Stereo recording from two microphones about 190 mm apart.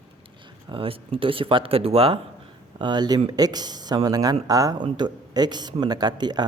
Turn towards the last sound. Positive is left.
turn(degrees=-20)  # may be behind; listen again after turning